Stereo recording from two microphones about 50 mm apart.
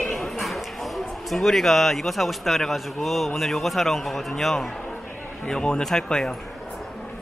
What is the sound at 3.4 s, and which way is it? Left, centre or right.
A man's voice, centre.